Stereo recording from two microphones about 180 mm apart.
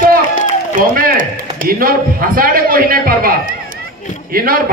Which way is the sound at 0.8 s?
50° right (ahead or behind).